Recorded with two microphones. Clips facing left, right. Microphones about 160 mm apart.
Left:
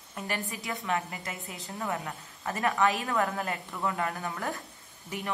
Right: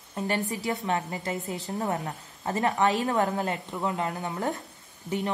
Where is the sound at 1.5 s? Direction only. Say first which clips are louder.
Right 2 dB; 35° right (ahead or behind).